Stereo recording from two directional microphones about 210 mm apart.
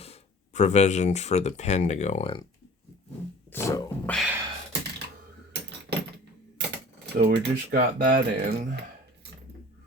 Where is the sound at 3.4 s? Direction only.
10° left (ahead or behind).